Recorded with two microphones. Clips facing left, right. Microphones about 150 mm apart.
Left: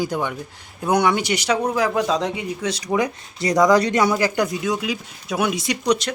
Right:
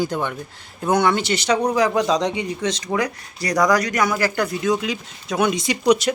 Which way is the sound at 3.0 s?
25° left (ahead or behind).